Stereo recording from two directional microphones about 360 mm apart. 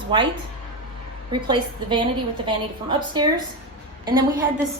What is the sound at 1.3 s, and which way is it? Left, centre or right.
A woman's voice, centre.